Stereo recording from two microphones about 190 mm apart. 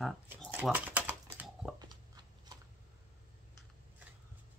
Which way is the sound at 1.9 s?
20° right (ahead or behind).